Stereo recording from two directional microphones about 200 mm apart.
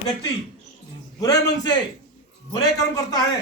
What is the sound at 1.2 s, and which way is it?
A man's voice, 20° left (ahead or behind).